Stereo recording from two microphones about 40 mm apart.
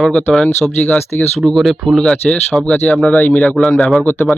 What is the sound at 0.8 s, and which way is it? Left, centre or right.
Speech, left.